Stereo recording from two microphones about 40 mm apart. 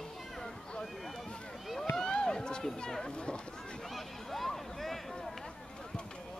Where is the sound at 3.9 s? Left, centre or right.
Centre.